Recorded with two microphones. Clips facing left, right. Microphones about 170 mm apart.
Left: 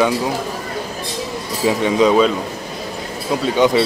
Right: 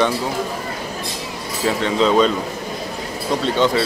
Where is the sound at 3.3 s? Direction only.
5° left (ahead or behind).